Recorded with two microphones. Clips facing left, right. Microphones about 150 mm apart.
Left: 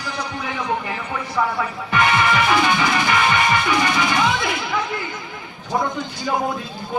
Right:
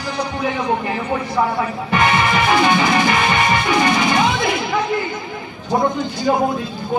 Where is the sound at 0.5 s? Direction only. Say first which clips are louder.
Right 4 dB; 25° right (ahead or behind).